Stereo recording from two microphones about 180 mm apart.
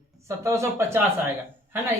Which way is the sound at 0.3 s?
15° right (ahead or behind).